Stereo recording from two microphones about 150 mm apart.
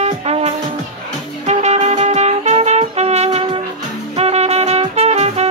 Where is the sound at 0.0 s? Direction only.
45° right (ahead or behind).